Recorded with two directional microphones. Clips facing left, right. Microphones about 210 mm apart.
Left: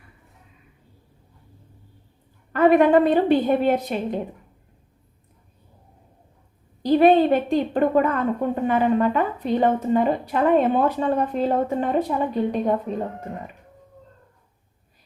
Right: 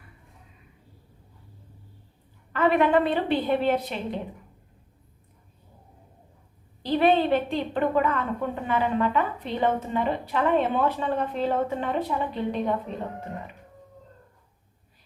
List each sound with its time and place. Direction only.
2.5 s a woman's voice: 45° left (ahead or behind)
6.8 s a woman's voice: 45° left (ahead or behind)